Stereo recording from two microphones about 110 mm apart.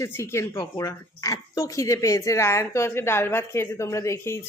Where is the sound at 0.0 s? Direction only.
25° left (ahead or behind).